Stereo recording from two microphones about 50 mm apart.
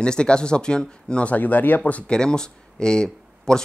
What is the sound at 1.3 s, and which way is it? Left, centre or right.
Speech, left.